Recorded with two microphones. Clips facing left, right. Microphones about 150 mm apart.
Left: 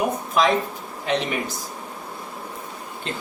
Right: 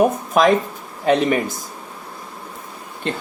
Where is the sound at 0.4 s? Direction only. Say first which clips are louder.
Right 5 dB; 50° right (ahead or behind).